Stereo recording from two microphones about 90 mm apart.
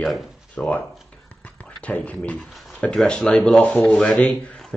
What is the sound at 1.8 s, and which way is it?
Speech, 15° left (ahead or behind).